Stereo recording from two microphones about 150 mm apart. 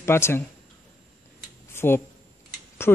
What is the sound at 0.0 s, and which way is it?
Speech, 15° left (ahead or behind).